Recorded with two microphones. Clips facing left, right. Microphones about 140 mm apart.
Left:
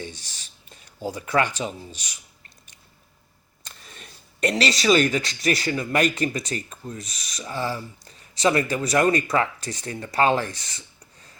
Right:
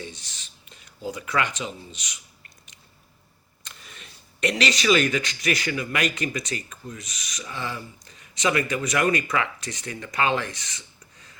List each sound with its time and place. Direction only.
0.9 s speech: 30° left (ahead or behind)
3.9 s speech: 40° left (ahead or behind)